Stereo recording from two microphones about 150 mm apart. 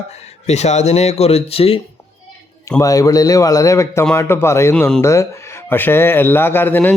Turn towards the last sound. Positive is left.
turn(degrees=15)  # may be behind; listen again after turning